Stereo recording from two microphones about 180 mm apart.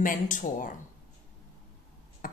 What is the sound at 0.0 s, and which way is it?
Speech, 45° left (ahead or behind).